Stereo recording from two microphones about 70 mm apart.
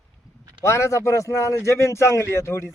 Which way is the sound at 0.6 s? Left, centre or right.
Left.